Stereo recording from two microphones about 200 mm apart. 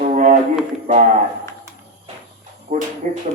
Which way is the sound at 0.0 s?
40° right (ahead or behind).